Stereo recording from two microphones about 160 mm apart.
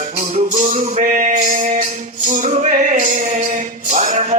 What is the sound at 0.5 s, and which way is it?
Speech, 55° right (ahead or behind).